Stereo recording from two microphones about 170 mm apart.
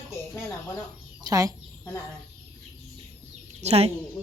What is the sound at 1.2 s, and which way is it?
Speech, 20° right (ahead or behind).